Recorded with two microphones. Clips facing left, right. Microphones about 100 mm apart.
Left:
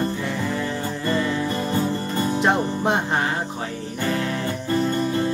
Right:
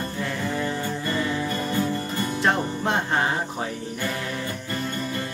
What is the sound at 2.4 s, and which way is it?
Music, 20° left (ahead or behind).